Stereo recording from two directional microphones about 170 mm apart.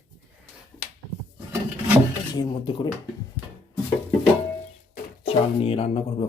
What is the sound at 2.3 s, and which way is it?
Speech, 25° left (ahead or behind).